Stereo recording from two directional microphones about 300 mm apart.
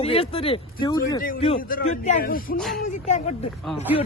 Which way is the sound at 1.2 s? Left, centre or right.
Left.